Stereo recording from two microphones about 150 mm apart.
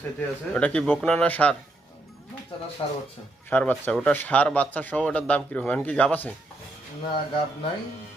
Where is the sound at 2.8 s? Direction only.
30° left (ahead or behind).